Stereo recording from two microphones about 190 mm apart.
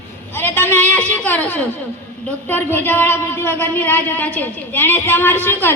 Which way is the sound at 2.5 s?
10° left (ahead or behind).